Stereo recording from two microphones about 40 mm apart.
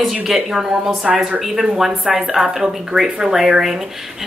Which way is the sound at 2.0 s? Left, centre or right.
Right.